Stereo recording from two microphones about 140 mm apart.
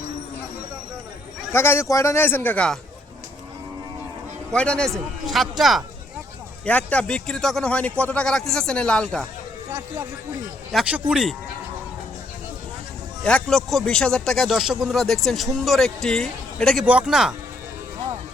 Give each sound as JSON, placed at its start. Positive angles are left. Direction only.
{"t": 1.5, "sound": "speech", "side_deg": 15}
{"t": 4.5, "sound": "speech", "side_deg": 5}
{"t": 6.7, "sound": "speech", "side_deg": 10}
{"t": 10.7, "sound": "speech", "side_deg": 0}
{"t": 13.2, "sound": "speech", "side_deg": 5}
{"t": 16.8, "sound": "speech", "side_deg": -10}